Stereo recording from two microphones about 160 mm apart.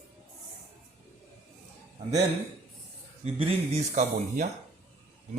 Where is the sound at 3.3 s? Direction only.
40° right (ahead or behind).